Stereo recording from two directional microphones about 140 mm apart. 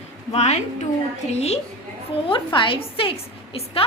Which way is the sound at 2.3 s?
35° left (ahead or behind).